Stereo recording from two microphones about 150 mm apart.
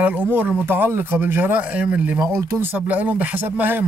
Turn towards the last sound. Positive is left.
turn(degrees=-10)  # may be behind; listen again after turning